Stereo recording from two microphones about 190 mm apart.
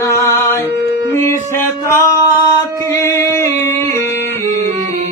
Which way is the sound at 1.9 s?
15° left (ahead or behind).